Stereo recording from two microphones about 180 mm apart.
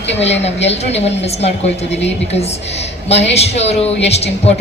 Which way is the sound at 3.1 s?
35° left (ahead or behind).